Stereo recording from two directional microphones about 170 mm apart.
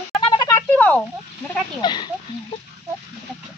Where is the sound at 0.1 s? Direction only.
25° left (ahead or behind).